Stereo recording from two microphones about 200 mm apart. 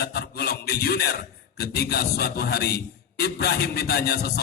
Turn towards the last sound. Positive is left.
turn(degrees=50)  # may be behind; listen again after turning